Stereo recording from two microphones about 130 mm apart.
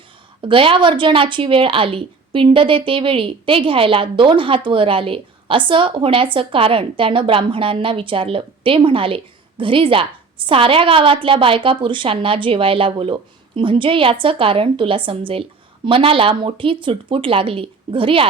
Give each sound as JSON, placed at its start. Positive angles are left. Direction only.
{"t": 0.4, "sound": "a woman's voice", "side_deg": -40}